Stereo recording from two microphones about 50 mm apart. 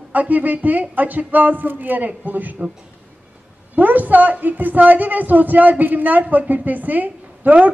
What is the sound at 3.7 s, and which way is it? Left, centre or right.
A woman's voice, right.